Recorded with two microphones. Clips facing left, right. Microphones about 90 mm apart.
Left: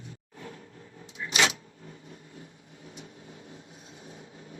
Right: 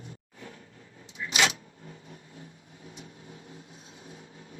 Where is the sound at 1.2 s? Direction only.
30° left (ahead or behind).